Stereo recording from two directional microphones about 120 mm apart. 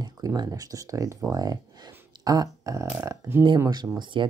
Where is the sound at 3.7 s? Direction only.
40° right (ahead or behind).